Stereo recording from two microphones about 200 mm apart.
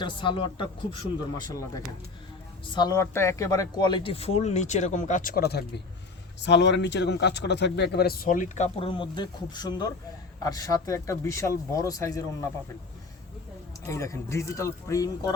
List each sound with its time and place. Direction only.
0.0 s speech: 25° left (ahead or behind)
13.8 s speech: 15° left (ahead or behind)